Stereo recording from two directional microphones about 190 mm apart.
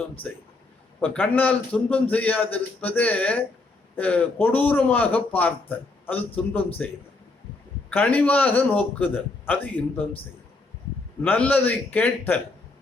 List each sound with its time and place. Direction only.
1.0 s a man's voice: 10° left (ahead or behind)
7.9 s a man's voice: 10° left (ahead or behind)
11.2 s a man's voice: 10° left (ahead or behind)